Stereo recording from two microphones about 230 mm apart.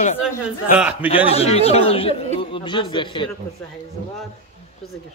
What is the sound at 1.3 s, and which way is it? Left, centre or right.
Speech, left.